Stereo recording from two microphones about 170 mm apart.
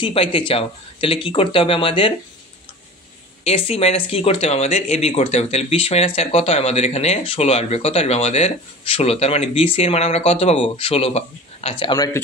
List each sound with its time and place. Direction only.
0.0 s speech: 30° left (ahead or behind)
3.4 s speech: 35° left (ahead or behind)